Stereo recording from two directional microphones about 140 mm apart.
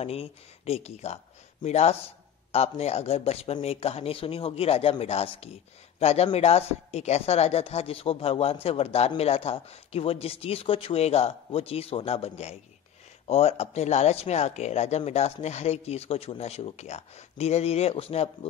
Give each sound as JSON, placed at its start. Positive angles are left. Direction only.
{"t": 0.0, "sound": "speech", "side_deg": 45}